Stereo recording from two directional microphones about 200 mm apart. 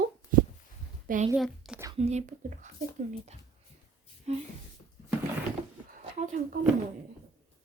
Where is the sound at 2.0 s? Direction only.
35° right (ahead or behind).